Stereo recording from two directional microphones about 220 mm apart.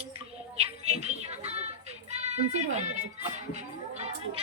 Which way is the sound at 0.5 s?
30° right (ahead or behind).